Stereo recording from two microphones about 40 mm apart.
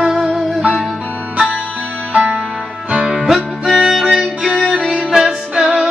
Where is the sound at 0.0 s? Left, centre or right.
Centre.